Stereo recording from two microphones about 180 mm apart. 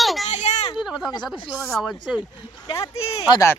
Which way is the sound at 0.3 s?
40° left (ahead or behind).